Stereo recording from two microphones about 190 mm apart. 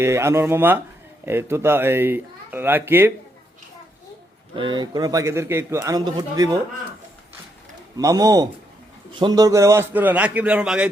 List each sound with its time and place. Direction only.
0.0 s speech: 15° right (ahead or behind)
4.5 s a man's voice: 25° right (ahead or behind)
7.9 s a man's voice: 20° right (ahead or behind)